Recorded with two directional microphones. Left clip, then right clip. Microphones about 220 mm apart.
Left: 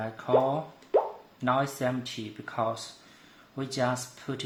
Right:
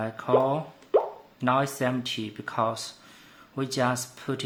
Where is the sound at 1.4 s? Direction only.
25° right (ahead or behind).